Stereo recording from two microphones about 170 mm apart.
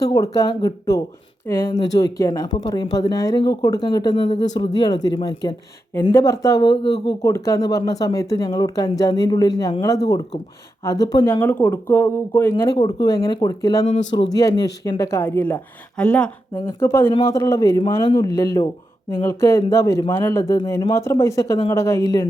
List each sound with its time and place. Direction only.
0.0 s speech: 20° left (ahead or behind)
12.7 s speech: 25° left (ahead or behind)